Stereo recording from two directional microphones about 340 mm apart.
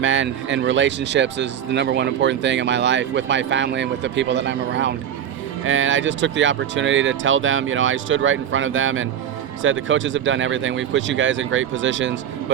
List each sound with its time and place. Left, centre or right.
0.0 s speech: right